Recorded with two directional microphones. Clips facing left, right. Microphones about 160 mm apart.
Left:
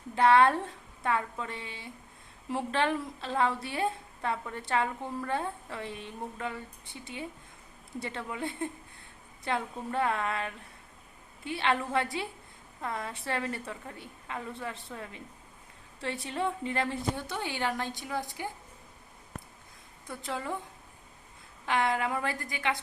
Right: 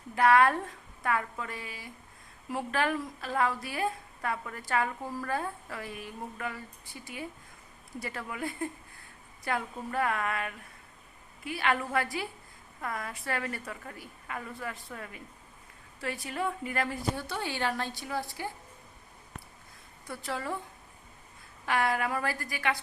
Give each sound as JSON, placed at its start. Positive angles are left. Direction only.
{"t": 0.1, "sound": "a woman's voice", "side_deg": 25}
{"t": 4.9, "sound": "a woman's voice", "side_deg": -5}
{"t": 5.2, "sound": "a woman's voice", "side_deg": 25}
{"t": 20.1, "sound": "a woman's voice", "side_deg": 20}
{"t": 21.7, "sound": "a woman's voice", "side_deg": 20}